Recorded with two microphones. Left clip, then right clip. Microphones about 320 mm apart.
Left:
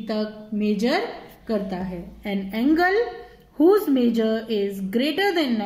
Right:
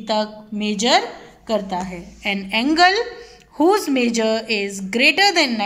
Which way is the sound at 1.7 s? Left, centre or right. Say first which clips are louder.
Right 6 dB; right.